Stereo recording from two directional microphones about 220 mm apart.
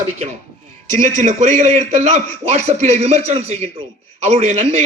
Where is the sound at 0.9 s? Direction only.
35° right (ahead or behind).